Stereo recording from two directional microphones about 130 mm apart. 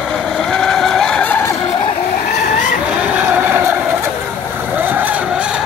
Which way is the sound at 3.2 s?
15° right (ahead or behind).